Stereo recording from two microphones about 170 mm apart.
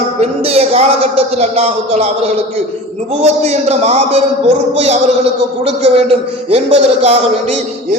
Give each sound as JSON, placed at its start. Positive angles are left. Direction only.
{"t": 0.2, "sound": "a man's voice", "side_deg": -35}